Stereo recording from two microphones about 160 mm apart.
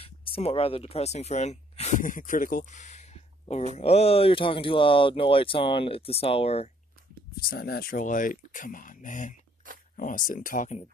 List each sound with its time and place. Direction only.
0.0 s speech: 35° left (ahead or behind); by 2.6 s 55° left (ahead or behind)
2.7 s a sound: 50° left (ahead or behind)
3.7 s speech: 40° left (ahead or behind)
7.4 s speech: 75° left (ahead or behind); by 10.8 s 55° left (ahead or behind)